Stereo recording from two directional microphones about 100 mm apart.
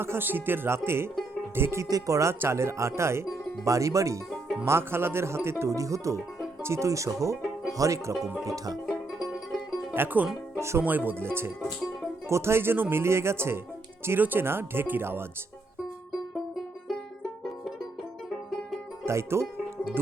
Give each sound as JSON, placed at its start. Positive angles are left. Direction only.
{"t": 0.0, "sound": "speech", "side_deg": -20}
{"t": 8.9, "sound": "music", "side_deg": 0}
{"t": 9.9, "sound": "speech", "side_deg": -20}
{"t": 12.3, "sound": "speech", "side_deg": -25}
{"t": 19.0, "sound": "speech", "side_deg": -30}